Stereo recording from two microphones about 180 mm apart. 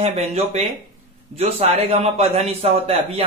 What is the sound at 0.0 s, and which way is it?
Speech, 40° right (ahead or behind).